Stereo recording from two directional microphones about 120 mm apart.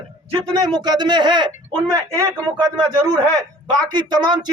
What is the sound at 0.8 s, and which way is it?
A man's voice, 35° right (ahead or behind).